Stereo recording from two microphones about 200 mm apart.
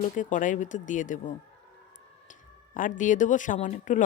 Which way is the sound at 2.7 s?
40° left (ahead or behind).